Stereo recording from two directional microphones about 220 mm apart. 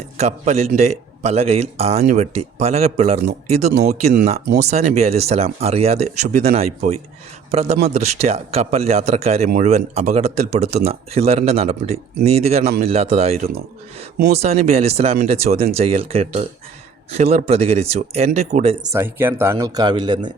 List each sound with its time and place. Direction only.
0.2 s speech: 30° right (ahead or behind)
3.7 s speech: 45° right (ahead or behind)
4.0 s speech: 35° right (ahead or behind)
14.7 s speech: 30° right (ahead or behind)